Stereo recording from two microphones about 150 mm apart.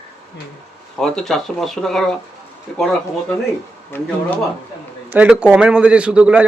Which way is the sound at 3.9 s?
15° left (ahead or behind).